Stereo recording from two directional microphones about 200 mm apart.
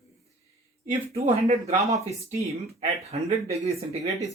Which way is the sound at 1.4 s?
35° right (ahead or behind).